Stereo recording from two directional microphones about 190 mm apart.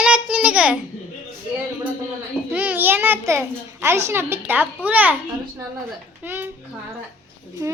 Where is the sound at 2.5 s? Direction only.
10° right (ahead or behind).